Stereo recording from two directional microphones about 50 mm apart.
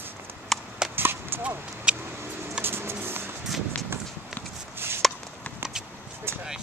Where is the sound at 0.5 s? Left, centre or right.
Centre.